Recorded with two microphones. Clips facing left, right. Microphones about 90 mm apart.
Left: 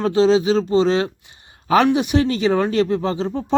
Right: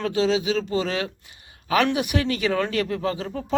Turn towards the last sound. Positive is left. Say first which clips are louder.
# left 6 dB
turn(degrees=30)  # may be behind; listen again after turning